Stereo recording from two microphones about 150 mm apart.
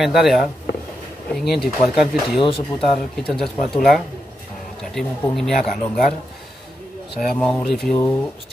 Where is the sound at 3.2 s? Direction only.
5° left (ahead or behind).